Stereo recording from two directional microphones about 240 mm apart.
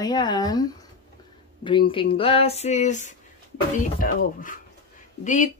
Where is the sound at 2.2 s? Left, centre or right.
Left.